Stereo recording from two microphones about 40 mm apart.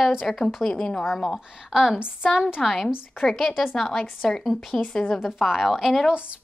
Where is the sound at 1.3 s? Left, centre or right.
Centre.